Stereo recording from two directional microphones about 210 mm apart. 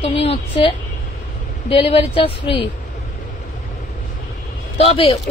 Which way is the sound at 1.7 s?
25° left (ahead or behind).